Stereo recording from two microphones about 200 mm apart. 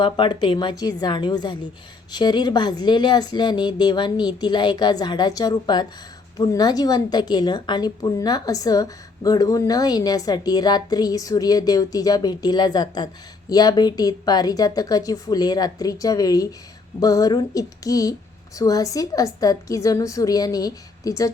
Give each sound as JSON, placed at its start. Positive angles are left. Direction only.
{"t": 0.0, "sound": "a woman's voice", "side_deg": 20}